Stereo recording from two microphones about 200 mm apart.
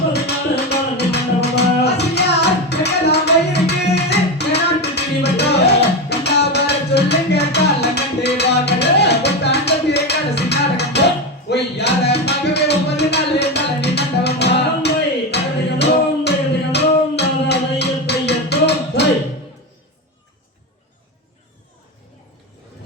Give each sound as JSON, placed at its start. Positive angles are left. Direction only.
{"t": 0.1, "sound": "music", "side_deg": 55}
{"t": 16.7, "sound": "music", "side_deg": 55}